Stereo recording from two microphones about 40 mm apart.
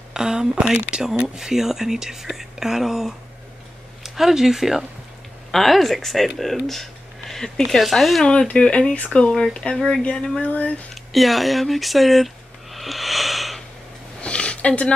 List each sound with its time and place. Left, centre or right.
0.1 s speech: centre
5.5 s speech: centre
8.2 s speech: left
9.3 s speech: centre
10.4 s speech: left
11.1 s speech: centre
12.7 s a sound: centre
14.2 s a sound: left